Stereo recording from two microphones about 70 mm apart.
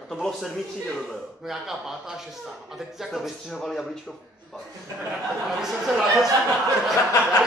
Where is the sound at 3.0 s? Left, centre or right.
Centre.